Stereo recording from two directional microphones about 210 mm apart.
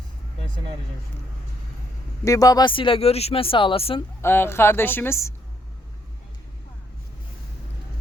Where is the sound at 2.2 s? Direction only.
15° left (ahead or behind).